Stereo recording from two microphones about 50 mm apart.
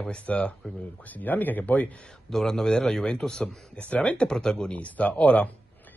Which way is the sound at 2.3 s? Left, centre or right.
Centre.